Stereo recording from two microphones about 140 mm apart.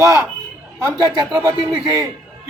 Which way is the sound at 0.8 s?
25° right (ahead or behind).